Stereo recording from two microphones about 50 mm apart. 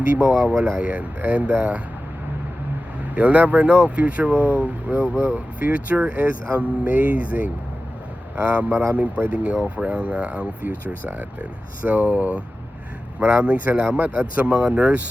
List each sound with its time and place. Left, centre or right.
0.6 s speech: right
3.2 s speech: right